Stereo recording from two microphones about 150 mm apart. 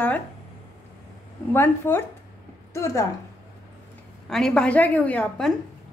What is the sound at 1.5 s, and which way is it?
A woman's voice, 15° left (ahead or behind).